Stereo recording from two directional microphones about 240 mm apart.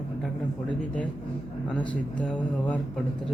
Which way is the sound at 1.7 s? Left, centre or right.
Centre.